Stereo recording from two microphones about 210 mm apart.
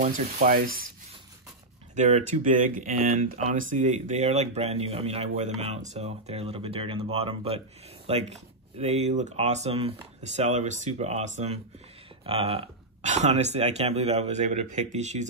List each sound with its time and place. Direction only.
0.0 s speech: 40° right (ahead or behind)
2.0 s speech: 35° right (ahead or behind)